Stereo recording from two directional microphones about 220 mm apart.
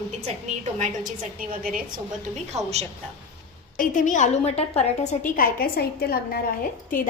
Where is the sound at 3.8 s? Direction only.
35° left (ahead or behind).